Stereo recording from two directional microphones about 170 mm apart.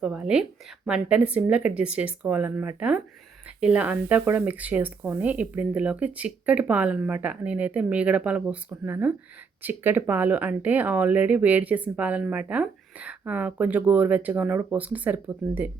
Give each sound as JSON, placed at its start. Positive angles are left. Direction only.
{"t": 0.0, "sound": "speech", "side_deg": -5}